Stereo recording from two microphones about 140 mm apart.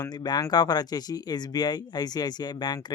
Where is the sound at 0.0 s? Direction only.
30° left (ahead or behind).